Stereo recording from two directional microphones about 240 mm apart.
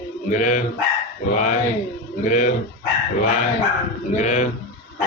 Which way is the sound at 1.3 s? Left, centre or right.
Left.